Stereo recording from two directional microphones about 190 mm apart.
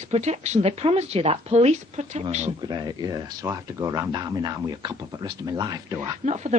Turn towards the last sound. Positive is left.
turn(degrees=-35)  # may be behind; listen again after turning